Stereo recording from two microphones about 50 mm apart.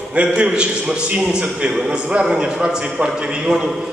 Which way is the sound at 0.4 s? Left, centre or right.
Right.